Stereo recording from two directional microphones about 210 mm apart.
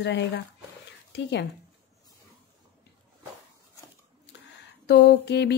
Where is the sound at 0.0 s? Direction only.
55° left (ahead or behind).